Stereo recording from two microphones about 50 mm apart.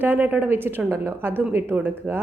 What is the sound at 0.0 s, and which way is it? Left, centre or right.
A woman's voice, right.